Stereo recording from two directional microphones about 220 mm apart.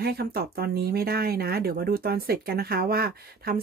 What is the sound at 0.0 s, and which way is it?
Speech, 45° right (ahead or behind).